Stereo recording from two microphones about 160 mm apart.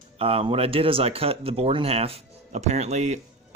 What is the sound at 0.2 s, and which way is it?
Speech, 40° right (ahead or behind).